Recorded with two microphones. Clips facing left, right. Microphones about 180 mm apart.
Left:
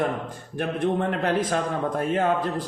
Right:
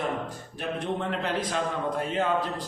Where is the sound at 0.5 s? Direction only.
55° left (ahead or behind).